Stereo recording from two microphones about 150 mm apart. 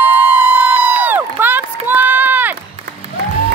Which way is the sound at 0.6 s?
10° right (ahead or behind).